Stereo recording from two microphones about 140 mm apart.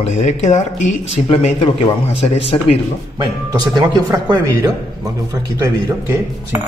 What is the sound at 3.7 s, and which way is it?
Speech, 30° right (ahead or behind).